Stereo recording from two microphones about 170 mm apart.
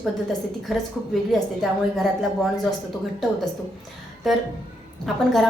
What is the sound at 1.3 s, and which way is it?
A woman's voice, centre (ahead or behind).